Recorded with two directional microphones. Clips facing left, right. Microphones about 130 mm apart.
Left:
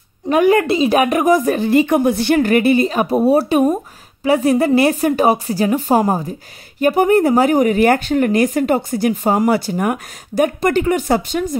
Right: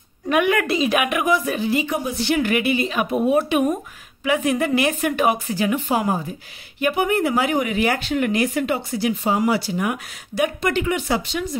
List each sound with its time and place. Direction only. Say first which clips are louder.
0.3 s a woman's voice: left 6 dB; 35° left (ahead or behind)